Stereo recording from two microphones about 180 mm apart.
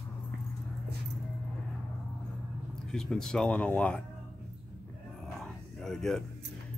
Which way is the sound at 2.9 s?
5° left (ahead or behind).